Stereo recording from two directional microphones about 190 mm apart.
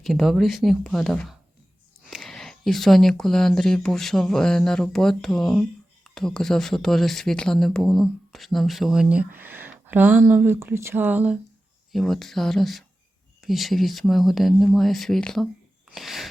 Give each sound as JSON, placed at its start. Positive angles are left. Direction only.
{"t": 0.0, "sound": "speech", "side_deg": 0}
{"t": 16.0, "sound": "sneeze", "side_deg": 0}